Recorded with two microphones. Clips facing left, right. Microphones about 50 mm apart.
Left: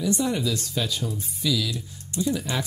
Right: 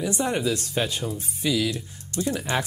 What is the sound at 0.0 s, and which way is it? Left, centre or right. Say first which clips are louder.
Speech: even; right.